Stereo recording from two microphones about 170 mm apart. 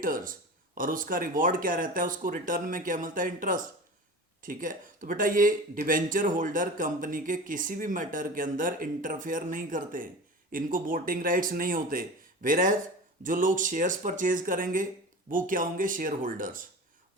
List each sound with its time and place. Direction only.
0.0 s speech: 55° right (ahead or behind)